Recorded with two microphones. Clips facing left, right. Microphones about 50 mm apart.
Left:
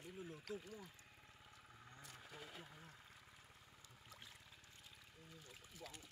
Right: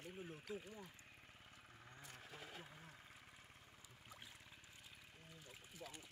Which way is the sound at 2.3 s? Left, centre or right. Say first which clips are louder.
Even; centre.